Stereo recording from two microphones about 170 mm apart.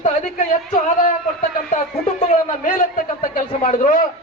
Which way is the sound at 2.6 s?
50° left (ahead or behind).